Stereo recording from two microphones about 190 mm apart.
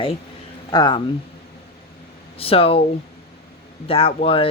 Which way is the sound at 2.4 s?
30° left (ahead or behind).